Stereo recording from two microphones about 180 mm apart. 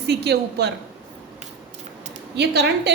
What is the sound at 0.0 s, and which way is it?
Speech, 65° right (ahead or behind).